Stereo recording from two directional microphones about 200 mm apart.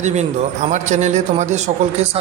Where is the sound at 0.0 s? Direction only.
35° right (ahead or behind).